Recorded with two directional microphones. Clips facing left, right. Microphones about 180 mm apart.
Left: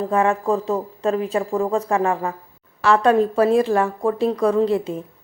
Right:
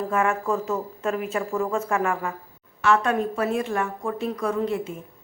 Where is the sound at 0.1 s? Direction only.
35° left (ahead or behind).